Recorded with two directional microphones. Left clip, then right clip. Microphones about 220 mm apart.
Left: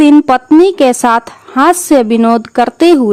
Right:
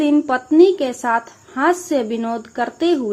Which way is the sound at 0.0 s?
50° left (ahead or behind).